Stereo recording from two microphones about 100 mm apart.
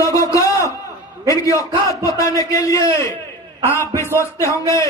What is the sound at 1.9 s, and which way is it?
A man's voice, 35° left (ahead or behind).